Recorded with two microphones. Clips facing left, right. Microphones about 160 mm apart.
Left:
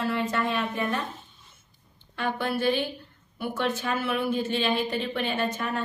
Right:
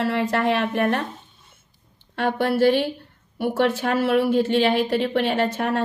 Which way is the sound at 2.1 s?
70° right (ahead or behind).